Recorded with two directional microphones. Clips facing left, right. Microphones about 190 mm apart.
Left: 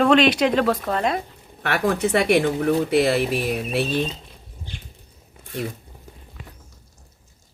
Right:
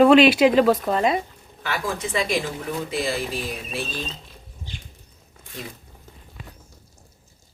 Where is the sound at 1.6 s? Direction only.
65° left (ahead or behind).